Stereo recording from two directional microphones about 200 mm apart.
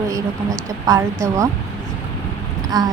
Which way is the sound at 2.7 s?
20° right (ahead or behind).